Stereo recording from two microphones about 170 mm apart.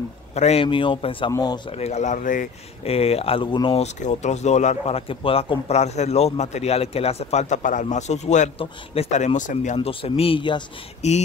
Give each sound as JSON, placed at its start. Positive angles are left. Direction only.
{"t": 0.3, "sound": "speech", "side_deg": 40}
{"t": 1.7, "sound": "speech", "side_deg": 40}
{"t": 2.8, "sound": "speech", "side_deg": 35}
{"t": 9.8, "sound": "speech", "side_deg": 35}
{"t": 11.0, "sound": "speech", "side_deg": 40}